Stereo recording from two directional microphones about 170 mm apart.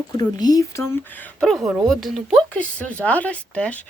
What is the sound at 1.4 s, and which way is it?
A woman's voice, centre (ahead or behind).